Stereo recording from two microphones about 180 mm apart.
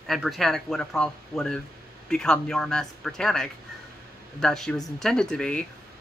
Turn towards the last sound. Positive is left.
turn(degrees=5)  # may be behind; listen again after turning